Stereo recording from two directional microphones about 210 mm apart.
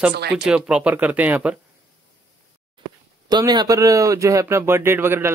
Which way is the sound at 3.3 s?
20° right (ahead or behind).